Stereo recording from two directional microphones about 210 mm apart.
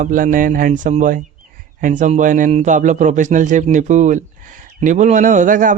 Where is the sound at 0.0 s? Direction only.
40° right (ahead or behind).